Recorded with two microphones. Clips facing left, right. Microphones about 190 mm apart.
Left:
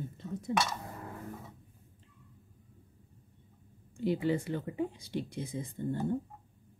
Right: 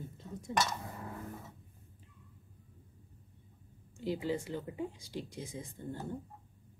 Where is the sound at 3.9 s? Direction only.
60° left (ahead or behind).